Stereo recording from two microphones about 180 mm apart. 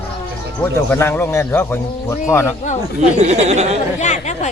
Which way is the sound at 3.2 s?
35° right (ahead or behind).